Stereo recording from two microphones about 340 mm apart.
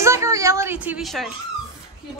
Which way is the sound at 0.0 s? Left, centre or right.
Centre.